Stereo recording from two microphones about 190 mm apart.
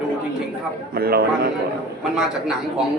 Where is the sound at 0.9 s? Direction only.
55° right (ahead or behind).